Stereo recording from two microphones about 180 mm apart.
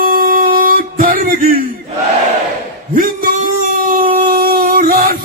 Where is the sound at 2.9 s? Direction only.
50° right (ahead or behind).